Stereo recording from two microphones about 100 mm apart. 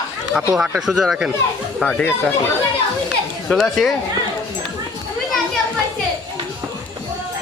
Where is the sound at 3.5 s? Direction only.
5° left (ahead or behind).